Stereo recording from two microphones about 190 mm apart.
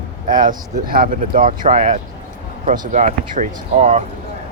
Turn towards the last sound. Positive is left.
turn(degrees=-40)  # may be behind; listen again after turning